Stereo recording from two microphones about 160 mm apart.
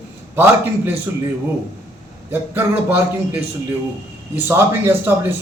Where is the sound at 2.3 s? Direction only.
10° right (ahead or behind).